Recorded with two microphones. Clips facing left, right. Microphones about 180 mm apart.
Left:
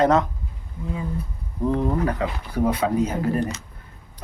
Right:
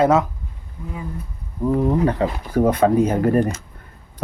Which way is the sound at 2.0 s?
30° right (ahead or behind).